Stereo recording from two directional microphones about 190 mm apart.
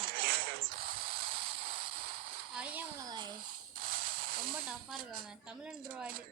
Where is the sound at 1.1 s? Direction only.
30° right (ahead or behind).